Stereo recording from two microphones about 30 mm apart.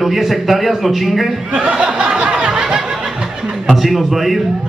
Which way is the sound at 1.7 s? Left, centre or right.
Right.